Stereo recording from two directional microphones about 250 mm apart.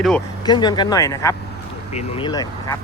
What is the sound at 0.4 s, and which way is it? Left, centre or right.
Speech, centre.